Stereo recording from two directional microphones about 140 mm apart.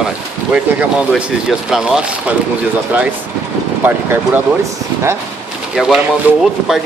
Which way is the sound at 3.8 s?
15° right (ahead or behind).